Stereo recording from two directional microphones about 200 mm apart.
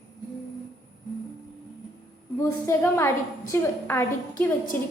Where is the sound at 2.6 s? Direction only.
15° left (ahead or behind).